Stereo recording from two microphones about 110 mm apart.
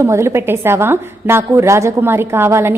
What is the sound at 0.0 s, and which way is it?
A woman's voice, 25° right (ahead or behind).